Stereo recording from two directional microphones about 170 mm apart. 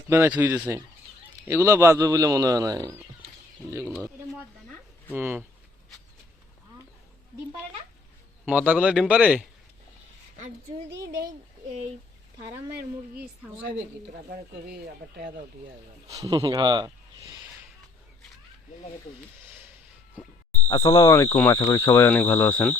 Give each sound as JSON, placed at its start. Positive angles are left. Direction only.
{"t": 0.1, "sound": "a man's voice", "side_deg": -10}
{"t": 5.1, "sound": "a man's voice", "side_deg": -10}
{"t": 8.4, "sound": "a man's voice", "side_deg": -10}
{"t": 14.7, "sound": "speech", "side_deg": -75}
{"t": 16.0, "sound": "speech", "side_deg": -20}
{"t": 20.7, "sound": "speech", "side_deg": 20}